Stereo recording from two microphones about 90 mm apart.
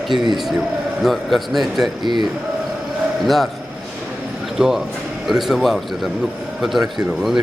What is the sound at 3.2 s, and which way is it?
Speech, centre (ahead or behind).